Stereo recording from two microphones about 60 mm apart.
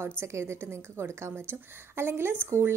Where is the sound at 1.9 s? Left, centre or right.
Right.